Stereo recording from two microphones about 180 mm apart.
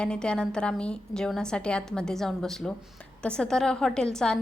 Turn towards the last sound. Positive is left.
turn(degrees=5)  # may be behind; listen again after turning